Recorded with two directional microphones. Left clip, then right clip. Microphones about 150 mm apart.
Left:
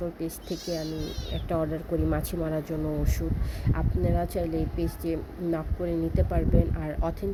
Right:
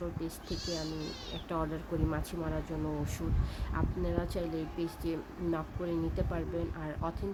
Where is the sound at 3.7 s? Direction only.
15° left (ahead or behind).